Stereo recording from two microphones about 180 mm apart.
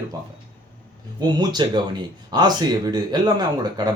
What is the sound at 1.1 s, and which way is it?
Speech, 25° right (ahead or behind).